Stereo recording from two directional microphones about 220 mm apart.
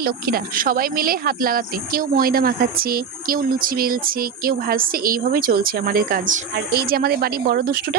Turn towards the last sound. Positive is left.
turn(degrees=-45)  # may be behind; listen again after turning